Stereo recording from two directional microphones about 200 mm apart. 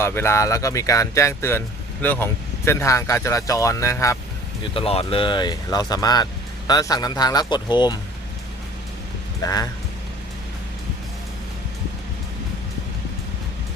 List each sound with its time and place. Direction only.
0.0 s speech: 10° left (ahead or behind)
4.7 s speech: 30° left (ahead or behind)
9.4 s speech: 20° left (ahead or behind)